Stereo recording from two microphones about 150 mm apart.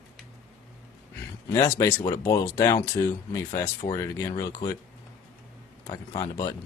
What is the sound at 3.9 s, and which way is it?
Speech, 20° left (ahead or behind).